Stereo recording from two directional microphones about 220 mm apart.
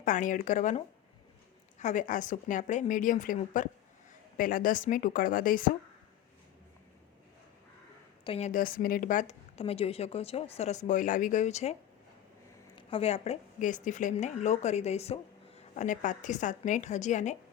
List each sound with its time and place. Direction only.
0.0 s a woman's voice: 35° left (ahead or behind)
1.8 s a woman's voice: 35° left (ahead or behind)
8.2 s a woman's voice: 25° left (ahead or behind)